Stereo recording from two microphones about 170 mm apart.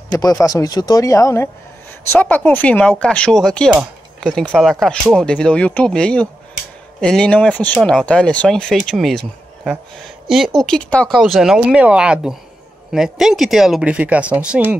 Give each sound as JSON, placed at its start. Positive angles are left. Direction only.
{"t": 0.1, "sound": "speech", "side_deg": 20}